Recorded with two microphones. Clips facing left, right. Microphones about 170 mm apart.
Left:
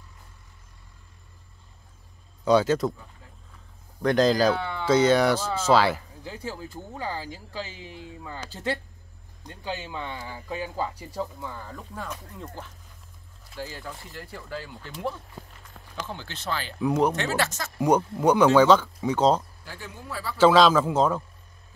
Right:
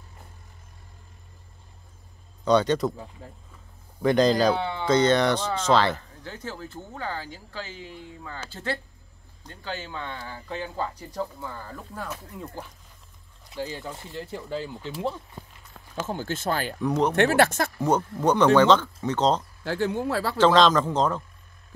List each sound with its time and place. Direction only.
2.4 s speech: 5° left (ahead or behind)
4.0 s speech: centre (ahead or behind)
4.6 s speech: 25° right (ahead or behind)
4.8 s speech: 10° left (ahead or behind)
13.6 s speech: 20° right (ahead or behind)
16.1 s speech: 45° right (ahead or behind)
16.8 s speech: 5° left (ahead or behind)
17.1 s speech: 55° right (ahead or behind)
17.7 s speech: 10° left (ahead or behind)
19.6 s speech: 75° right (ahead or behind)
20.3 s speech: 10° left (ahead or behind)